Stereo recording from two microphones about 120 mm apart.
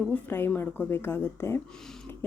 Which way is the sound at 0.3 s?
20° left (ahead or behind).